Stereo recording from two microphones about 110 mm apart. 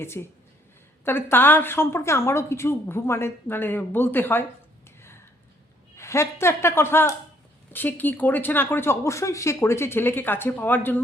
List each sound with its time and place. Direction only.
0.1 s a woman's voice: 20° left (ahead or behind)
6.0 s a woman's voice: 25° left (ahead or behind)